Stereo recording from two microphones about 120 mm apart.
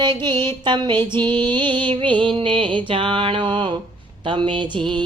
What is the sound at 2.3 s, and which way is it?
Mantra, 45° right (ahead or behind).